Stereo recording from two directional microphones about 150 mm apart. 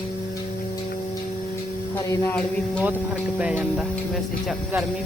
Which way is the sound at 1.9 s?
20° left (ahead or behind).